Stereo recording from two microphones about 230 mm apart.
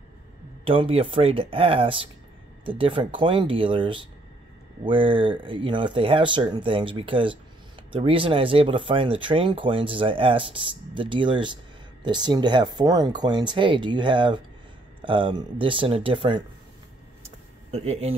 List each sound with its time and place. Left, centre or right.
0.7 s speech: right
17.6 s a man's voice: right